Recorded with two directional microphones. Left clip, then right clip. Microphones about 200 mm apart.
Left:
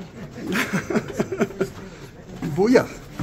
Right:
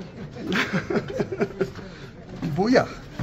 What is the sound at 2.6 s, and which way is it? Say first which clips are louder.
Speech: left 3 dB; 15° left (ahead or behind).